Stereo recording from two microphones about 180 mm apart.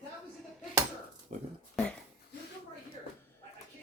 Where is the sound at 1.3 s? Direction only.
45° right (ahead or behind).